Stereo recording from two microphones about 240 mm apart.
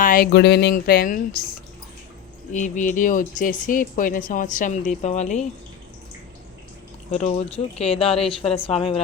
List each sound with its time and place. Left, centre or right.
0.0 s speech: left
2.5 s speech: left
7.1 s speech: left